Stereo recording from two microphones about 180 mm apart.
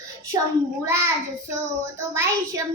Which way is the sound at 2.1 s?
15° right (ahead or behind).